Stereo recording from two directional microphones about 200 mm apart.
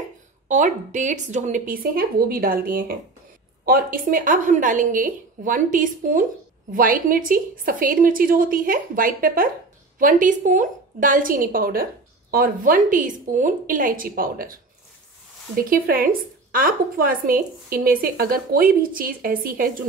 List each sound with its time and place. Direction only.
0.5 s a woman's voice: 40° right (ahead or behind)